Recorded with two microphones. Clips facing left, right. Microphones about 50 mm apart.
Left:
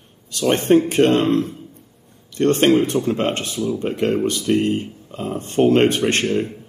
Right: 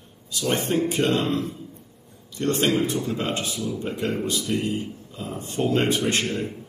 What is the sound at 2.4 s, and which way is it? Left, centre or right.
Speech, left.